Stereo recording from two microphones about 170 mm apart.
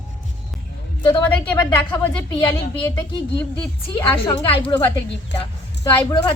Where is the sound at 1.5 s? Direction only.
10° left (ahead or behind).